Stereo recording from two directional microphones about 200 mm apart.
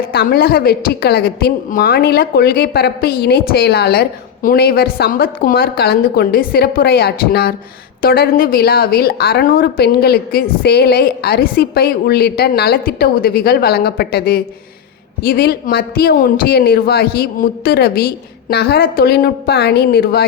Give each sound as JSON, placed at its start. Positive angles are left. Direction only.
{"t": 0.0, "sound": "a woman's voice", "side_deg": 50}